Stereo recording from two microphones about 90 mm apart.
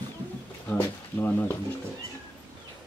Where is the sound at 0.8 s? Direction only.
20° left (ahead or behind).